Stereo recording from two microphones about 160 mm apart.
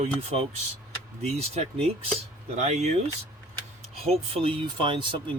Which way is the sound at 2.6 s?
45° right (ahead or behind).